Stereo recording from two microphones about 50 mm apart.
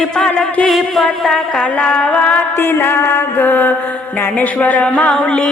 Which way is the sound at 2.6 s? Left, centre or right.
Left.